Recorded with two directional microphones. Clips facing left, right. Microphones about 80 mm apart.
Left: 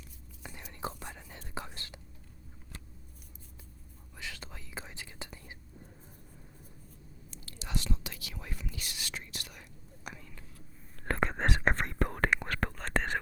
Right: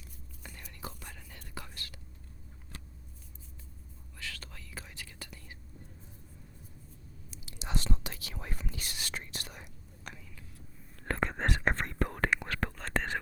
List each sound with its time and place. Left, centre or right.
0.8 s whispering: left
4.2 s whispering: centre
7.7 s whispering: right
10.1 s whispering: centre
11.0 s whispering: left